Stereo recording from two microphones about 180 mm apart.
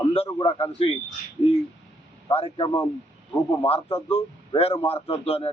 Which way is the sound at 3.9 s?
35° left (ahead or behind).